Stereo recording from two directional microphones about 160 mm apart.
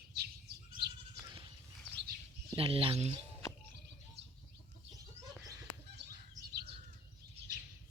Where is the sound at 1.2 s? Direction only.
30° right (ahead or behind).